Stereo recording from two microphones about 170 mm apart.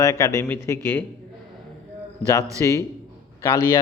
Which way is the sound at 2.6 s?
20° left (ahead or behind).